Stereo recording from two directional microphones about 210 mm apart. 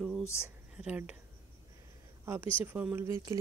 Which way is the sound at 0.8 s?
5° right (ahead or behind).